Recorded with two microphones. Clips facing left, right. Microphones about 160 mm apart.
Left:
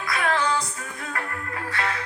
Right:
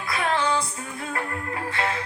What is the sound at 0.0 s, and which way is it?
Music, 30° right (ahead or behind).